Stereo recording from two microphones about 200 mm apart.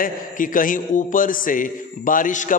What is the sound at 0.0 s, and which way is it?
A man's voice, 40° left (ahead or behind).